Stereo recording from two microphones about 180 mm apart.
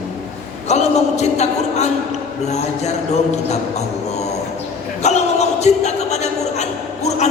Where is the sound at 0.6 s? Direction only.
40° left (ahead or behind).